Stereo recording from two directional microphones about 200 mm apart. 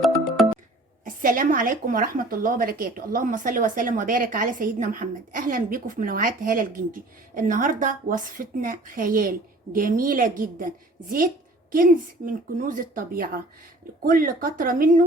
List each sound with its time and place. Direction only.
1.0 s a woman's voice: 45° right (ahead or behind)
11.7 s a woman's voice: 45° right (ahead or behind)